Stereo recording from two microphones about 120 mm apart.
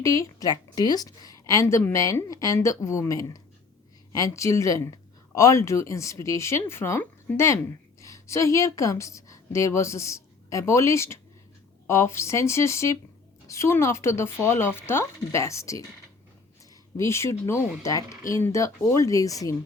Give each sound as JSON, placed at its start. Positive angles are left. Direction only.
{"t": 0.0, "sound": "a woman's voice", "side_deg": 25}
{"t": 17.0, "sound": "a woman's voice", "side_deg": 25}